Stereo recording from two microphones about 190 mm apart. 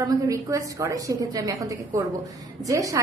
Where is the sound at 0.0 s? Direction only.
15° right (ahead or behind).